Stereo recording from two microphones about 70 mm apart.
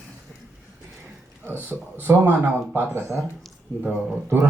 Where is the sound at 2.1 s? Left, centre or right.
Right.